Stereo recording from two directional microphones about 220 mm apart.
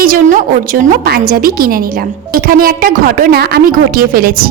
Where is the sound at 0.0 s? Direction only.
40° right (ahead or behind).